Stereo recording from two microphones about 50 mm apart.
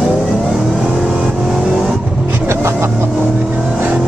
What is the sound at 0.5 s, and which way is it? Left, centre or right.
Vehicle, centre.